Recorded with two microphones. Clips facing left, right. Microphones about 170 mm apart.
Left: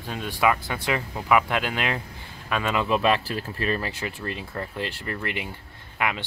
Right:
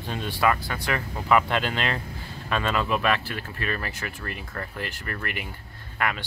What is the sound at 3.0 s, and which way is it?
Speech, 30° left (ahead or behind).